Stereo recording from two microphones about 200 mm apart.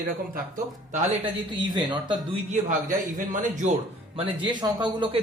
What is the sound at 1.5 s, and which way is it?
A man's voice, 25° right (ahead or behind).